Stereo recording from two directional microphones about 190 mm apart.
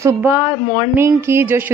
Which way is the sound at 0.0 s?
15° right (ahead or behind).